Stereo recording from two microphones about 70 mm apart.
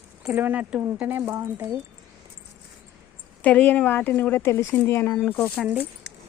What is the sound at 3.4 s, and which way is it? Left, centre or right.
A woman's voice, left.